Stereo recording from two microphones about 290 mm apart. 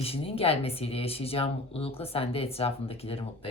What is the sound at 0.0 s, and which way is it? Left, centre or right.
Speech, centre.